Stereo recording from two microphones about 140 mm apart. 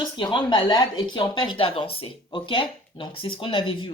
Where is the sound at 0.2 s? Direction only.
35° left (ahead or behind).